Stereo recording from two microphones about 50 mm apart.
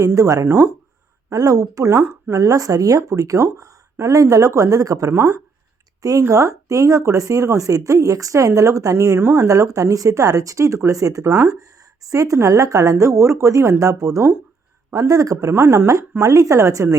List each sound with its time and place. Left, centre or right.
0.0 s speech: right
1.7 s speech: right
2.3 s speech: right
2.7 s speech: right
3.1 s speech: right